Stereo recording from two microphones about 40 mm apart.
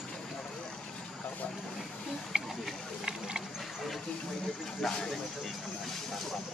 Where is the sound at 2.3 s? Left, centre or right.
Right.